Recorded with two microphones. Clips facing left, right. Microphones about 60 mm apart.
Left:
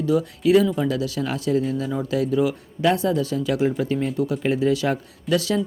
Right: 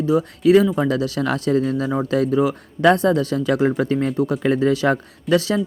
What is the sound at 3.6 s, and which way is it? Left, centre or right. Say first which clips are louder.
Speech: right 3 dB; right.